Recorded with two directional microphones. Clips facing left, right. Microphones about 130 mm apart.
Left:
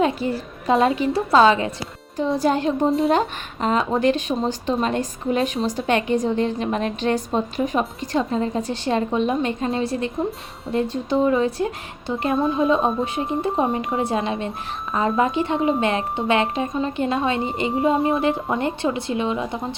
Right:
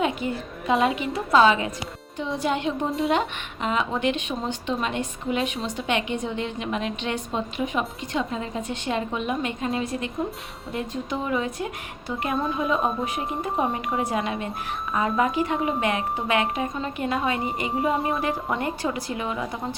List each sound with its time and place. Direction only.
0.0 s a woman's voice: 35° left (ahead or behind)